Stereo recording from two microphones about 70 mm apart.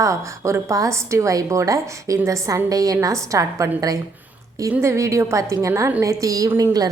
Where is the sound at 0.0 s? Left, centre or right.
Right.